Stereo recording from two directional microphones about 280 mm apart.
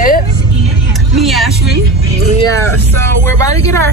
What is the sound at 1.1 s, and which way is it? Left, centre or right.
Vehicle, centre.